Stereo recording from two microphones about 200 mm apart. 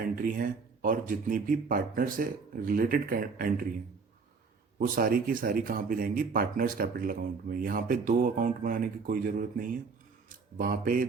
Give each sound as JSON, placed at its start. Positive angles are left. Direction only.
{"t": 0.2, "sound": "speech", "side_deg": -45}
{"t": 4.8, "sound": "speech", "side_deg": -45}